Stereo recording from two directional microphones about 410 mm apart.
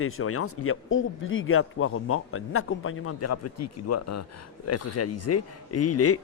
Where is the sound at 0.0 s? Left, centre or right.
Left.